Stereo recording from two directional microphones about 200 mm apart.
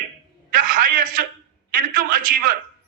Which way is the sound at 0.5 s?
45° right (ahead or behind).